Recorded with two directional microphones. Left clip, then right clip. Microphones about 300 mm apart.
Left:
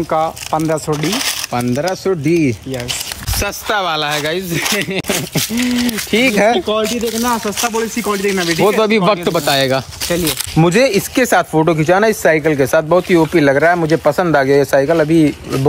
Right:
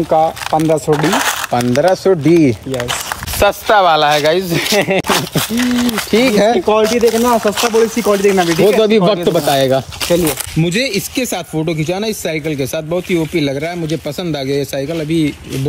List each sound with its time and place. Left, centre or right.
0.1 s speech: centre
0.9 s speech: centre
1.8 s speech: centre
5.6 s speech: centre
5.9 s speech: centre
11.3 s speech: centre
11.8 s speech: centre
14.9 s speech: centre